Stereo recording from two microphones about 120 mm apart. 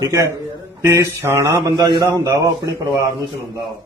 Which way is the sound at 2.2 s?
25° right (ahead or behind).